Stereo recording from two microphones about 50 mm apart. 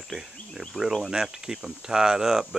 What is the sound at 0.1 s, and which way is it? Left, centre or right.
Speech, centre.